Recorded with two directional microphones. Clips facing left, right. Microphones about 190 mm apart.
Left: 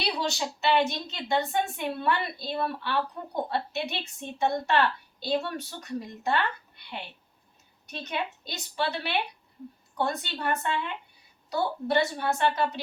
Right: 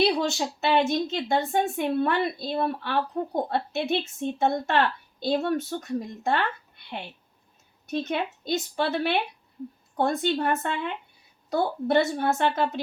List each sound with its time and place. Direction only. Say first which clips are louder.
0.0 s a woman's voice: right 7 dB; 50° right (ahead or behind)